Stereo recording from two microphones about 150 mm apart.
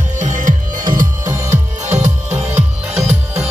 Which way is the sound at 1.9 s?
20° right (ahead or behind).